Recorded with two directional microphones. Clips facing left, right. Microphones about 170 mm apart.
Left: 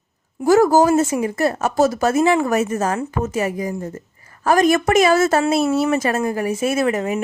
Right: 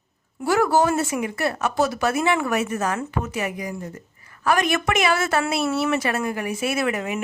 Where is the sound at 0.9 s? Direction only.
20° left (ahead or behind).